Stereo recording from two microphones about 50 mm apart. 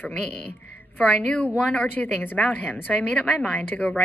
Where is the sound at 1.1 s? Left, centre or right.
Left.